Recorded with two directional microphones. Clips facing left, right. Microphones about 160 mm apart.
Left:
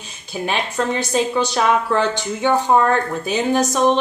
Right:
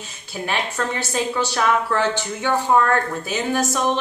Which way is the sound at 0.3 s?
20° left (ahead or behind).